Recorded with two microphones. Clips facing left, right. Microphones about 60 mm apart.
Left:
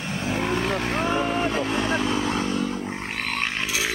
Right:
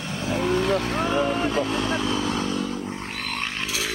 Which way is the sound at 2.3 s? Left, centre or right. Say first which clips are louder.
Left 1 dB; left.